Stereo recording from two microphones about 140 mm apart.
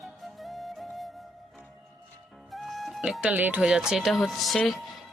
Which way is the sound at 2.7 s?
5° right (ahead or behind).